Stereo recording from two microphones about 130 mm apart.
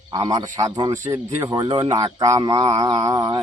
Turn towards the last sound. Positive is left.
turn(degrees=-30)  # may be behind; listen again after turning